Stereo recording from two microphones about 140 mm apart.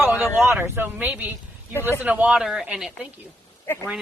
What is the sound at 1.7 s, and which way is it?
Speech, 15° left (ahead or behind).